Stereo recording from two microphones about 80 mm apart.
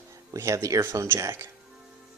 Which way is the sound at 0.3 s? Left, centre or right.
Right.